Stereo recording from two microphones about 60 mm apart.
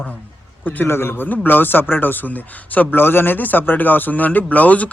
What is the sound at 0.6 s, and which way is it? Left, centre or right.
A man's voice, left.